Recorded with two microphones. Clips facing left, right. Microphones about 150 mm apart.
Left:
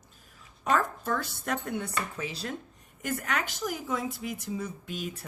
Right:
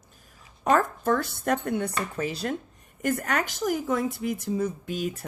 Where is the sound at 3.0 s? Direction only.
45° right (ahead or behind).